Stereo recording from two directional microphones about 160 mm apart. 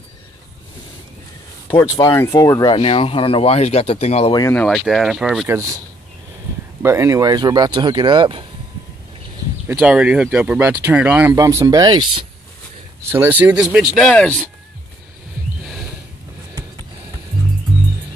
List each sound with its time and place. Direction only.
1.8 s speech: 20° left (ahead or behind)
2.7 s speech: 35° left (ahead or behind)
4.3 s speech: 20° left (ahead or behind)
4.6 s speech: centre (ahead or behind)
5.5 s speech: 20° right (ahead or behind)
6.8 s speech: 15° right (ahead or behind)
9.8 s speech: 5° right (ahead or behind)
11.3 s speech: 20° right (ahead or behind)
13.0 s speech: 15° right (ahead or behind); by 14.3 s 5° left (ahead or behind)